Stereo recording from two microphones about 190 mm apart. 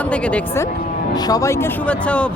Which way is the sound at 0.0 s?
5° left (ahead or behind).